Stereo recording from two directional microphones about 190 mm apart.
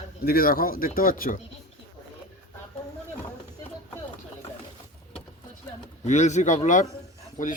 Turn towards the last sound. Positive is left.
turn(degrees=45)  # may be behind; listen again after turning